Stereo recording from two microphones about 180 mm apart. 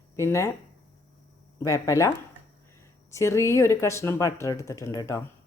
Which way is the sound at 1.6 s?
15° left (ahead or behind).